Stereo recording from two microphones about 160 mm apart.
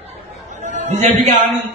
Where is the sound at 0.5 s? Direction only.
45° right (ahead or behind).